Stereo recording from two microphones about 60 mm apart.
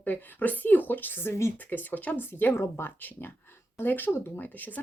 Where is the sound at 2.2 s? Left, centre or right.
Left.